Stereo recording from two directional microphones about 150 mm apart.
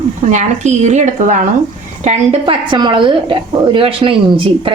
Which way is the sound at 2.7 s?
30° right (ahead or behind).